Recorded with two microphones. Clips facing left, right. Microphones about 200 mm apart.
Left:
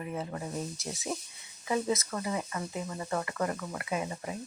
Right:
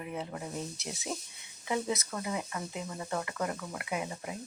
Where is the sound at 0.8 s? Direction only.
Centre (ahead or behind).